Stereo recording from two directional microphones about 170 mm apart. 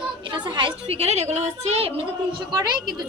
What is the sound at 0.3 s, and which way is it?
A woman's voice, 25° right (ahead or behind).